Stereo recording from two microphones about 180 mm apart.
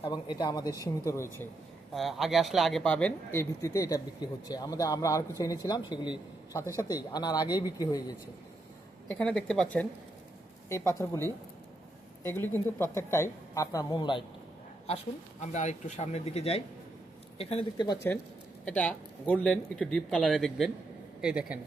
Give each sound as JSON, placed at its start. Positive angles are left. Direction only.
{"t": 0.0, "sound": "a man's voice", "side_deg": 25}
{"t": 1.9, "sound": "speech", "side_deg": 0}
{"t": 3.6, "sound": "a man's voice", "side_deg": 20}
{"t": 9.0, "sound": "a woman's voice", "side_deg": 5}
{"t": 12.3, "sound": "a woman's voice", "side_deg": 10}
{"t": 14.8, "sound": "speech", "side_deg": 40}
{"t": 18.6, "sound": "speech", "side_deg": 5}